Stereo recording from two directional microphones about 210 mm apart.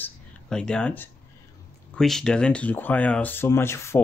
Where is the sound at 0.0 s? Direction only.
5° left (ahead or behind).